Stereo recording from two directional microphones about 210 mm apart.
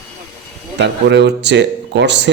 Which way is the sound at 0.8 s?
55° right (ahead or behind).